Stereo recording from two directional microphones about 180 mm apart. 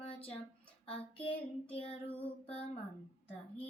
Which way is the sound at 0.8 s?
30° left (ahead or behind).